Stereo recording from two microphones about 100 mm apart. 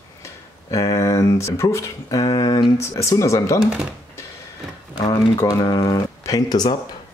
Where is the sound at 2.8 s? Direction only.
30° left (ahead or behind).